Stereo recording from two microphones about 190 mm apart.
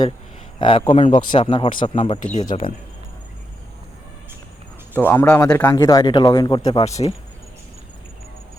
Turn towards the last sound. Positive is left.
turn(degrees=35)  # may be behind; listen again after turning